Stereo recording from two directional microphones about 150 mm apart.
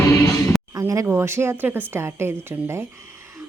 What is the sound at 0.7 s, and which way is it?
A woman's voice, 20° right (ahead or behind).